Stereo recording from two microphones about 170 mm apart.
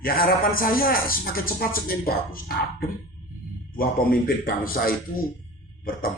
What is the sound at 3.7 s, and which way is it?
A man's voice, 60° left (ahead or behind).